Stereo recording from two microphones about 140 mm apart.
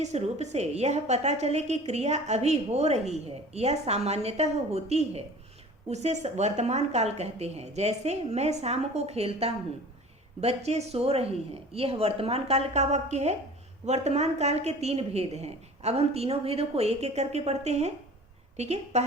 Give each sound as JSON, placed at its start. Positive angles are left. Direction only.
{"t": 0.0, "sound": "a woman's voice", "side_deg": -50}